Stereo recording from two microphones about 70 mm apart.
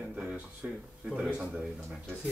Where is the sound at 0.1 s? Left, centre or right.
Centre.